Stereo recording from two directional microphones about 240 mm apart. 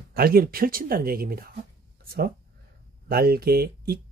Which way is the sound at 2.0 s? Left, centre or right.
Right.